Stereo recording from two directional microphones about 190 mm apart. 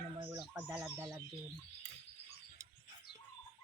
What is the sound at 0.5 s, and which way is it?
Speech, 10° right (ahead or behind).